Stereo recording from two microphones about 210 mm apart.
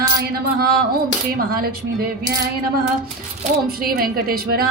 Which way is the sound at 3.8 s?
45° right (ahead or behind).